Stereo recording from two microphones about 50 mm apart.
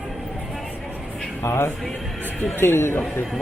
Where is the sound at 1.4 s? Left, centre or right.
Left.